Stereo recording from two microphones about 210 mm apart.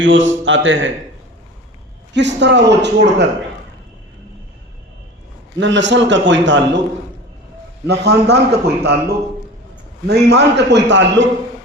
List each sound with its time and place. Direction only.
0.0 s a man's voice: 65° right (ahead or behind)
2.1 s a man's voice: 55° right (ahead or behind)
5.5 s a man's voice: 60° right (ahead or behind)
7.9 s a man's voice: 50° right (ahead or behind)